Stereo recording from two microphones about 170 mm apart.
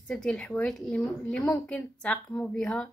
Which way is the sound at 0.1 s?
5° left (ahead or behind).